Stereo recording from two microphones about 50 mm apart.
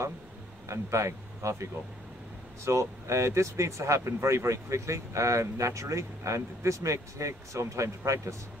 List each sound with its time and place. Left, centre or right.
0.7 s speech: right